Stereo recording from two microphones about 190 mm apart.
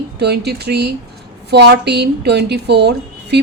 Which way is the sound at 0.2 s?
60° right (ahead or behind).